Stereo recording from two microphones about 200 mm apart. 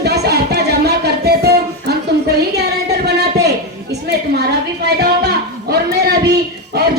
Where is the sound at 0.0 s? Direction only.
55° right (ahead or behind).